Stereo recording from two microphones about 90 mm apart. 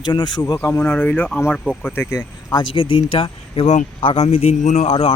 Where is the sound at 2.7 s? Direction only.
90° left.